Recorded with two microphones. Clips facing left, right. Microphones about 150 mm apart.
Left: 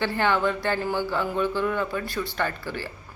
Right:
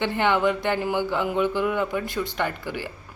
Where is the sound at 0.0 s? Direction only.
20° right (ahead or behind).